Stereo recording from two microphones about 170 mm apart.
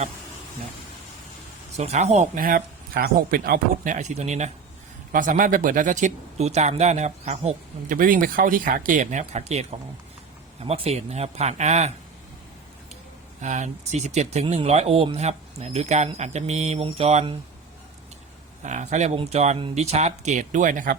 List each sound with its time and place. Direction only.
1.7 s speech: 40° right (ahead or behind)
13.4 s speech: 45° right (ahead or behind)
18.6 s speech: 45° right (ahead or behind)